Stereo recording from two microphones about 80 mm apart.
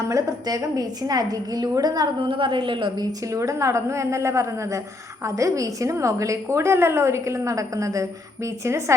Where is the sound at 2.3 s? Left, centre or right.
Right.